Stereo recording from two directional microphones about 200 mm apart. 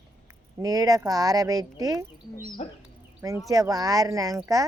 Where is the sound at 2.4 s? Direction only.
45° left (ahead or behind).